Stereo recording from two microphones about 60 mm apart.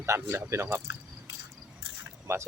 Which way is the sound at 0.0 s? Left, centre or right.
Right.